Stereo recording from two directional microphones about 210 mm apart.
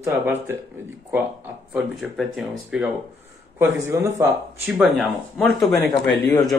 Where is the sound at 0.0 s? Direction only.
10° right (ahead or behind).